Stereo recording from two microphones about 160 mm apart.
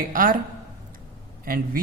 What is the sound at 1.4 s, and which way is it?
Speech, 65° right (ahead or behind).